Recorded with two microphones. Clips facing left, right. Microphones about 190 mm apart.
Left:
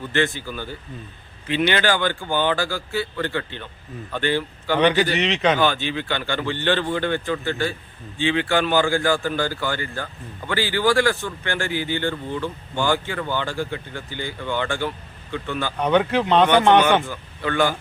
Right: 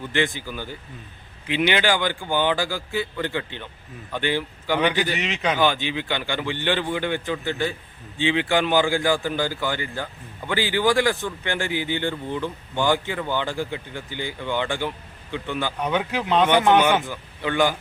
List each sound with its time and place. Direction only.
0.1 s speech: 15° right (ahead or behind)